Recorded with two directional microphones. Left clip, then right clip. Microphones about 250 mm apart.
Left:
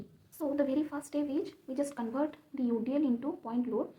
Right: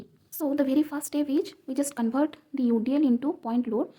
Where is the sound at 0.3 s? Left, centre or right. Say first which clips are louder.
Right 6 dB; right.